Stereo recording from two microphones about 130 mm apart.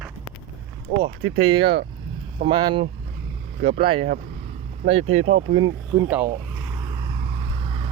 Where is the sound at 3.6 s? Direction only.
50° right (ahead or behind).